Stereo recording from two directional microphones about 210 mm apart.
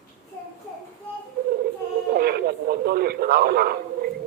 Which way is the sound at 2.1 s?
50° right (ahead or behind).